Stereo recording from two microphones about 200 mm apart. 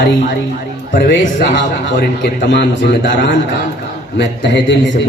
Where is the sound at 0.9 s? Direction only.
55° left (ahead or behind).